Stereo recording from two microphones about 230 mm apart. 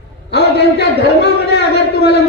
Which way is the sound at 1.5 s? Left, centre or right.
Left.